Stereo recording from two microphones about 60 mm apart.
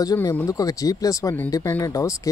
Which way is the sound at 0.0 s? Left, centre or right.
Left.